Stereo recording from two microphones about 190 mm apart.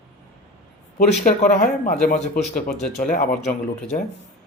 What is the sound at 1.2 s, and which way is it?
Speech, 45° left (ahead or behind).